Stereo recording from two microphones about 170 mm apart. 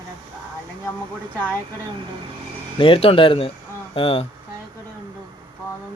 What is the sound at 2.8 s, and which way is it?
Speech, 30° left (ahead or behind).